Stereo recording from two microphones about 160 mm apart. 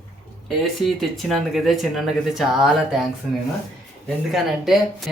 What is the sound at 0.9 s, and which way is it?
Speech, centre (ahead or behind).